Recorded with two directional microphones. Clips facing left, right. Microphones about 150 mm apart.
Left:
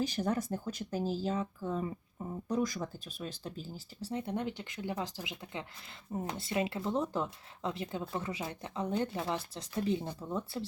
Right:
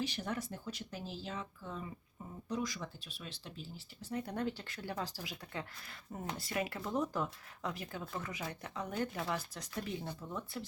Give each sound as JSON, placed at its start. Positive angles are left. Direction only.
{"t": 0.0, "sound": "speech", "side_deg": 40}
{"t": 4.1, "sound": "speech", "side_deg": 25}